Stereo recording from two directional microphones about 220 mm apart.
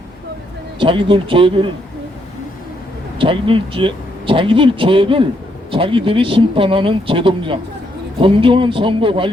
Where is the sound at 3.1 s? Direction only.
25° right (ahead or behind).